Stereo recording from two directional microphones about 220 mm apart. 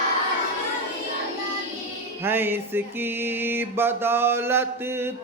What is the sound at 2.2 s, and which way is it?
Music, 10° right (ahead or behind).